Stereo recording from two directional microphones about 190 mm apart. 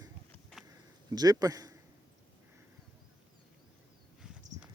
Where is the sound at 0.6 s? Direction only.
20° right (ahead or behind).